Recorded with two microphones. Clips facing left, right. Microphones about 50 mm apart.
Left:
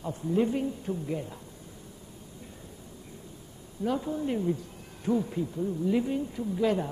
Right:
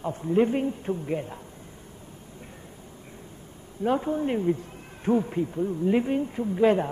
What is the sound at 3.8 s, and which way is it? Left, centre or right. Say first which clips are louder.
A man's voice: right 5 dB; right.